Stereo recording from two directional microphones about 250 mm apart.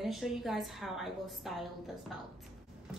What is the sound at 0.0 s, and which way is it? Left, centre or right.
A woman's voice, centre.